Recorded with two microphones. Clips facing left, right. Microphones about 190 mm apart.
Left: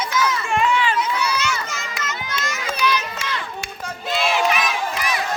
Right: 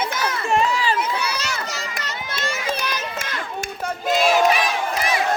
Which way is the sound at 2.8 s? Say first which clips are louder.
Left 5 dB; 50° right (ahead or behind).